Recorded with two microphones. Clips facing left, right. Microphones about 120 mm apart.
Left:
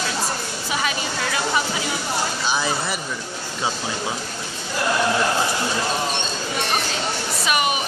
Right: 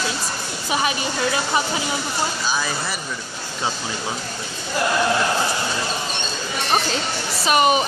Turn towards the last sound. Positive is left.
turn(degrees=-30)  # may be behind; listen again after turning